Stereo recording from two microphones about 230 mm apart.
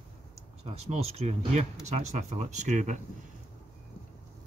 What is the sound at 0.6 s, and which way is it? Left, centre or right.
Speech, right.